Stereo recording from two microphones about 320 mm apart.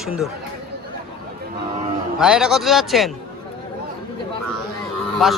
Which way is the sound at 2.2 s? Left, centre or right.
Centre.